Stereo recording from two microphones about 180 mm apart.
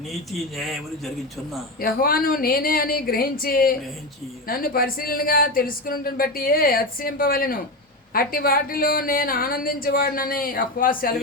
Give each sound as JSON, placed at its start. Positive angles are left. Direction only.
{"t": 0.1, "sound": "a man's voice", "side_deg": 0}
{"t": 1.8, "sound": "speech", "side_deg": 55}